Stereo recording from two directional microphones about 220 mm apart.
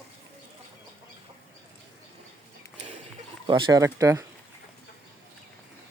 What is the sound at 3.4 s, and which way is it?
Speech, 20° right (ahead or behind).